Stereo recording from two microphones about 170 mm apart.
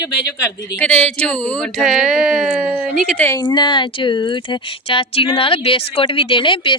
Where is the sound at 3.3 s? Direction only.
25° left (ahead or behind).